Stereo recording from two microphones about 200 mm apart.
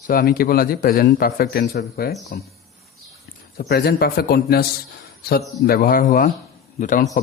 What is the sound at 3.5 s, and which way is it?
A man's voice, 50° left (ahead or behind).